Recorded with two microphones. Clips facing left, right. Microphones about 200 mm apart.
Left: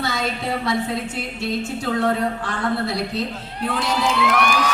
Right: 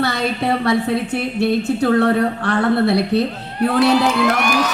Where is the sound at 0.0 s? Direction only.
65° right (ahead or behind).